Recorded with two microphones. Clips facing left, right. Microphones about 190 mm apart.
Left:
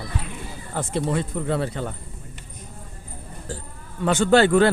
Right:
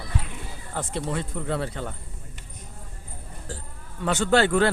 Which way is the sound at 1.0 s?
40° left (ahead or behind).